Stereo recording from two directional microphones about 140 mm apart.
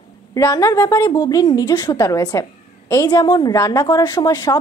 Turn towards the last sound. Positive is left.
turn(degrees=25)  # may be behind; listen again after turning